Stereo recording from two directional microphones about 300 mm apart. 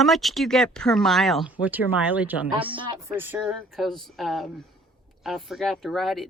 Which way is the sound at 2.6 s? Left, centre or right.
Centre.